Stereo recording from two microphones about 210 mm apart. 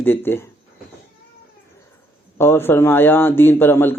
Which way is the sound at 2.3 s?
10° left (ahead or behind).